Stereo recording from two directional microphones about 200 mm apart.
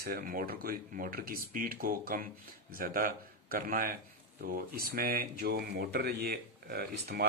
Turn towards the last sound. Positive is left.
turn(degrees=-50)  # may be behind; listen again after turning